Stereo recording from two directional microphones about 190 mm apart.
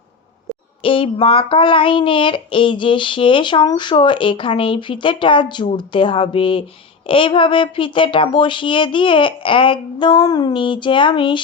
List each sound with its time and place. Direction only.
0.8 s child singing: 30° left (ahead or behind)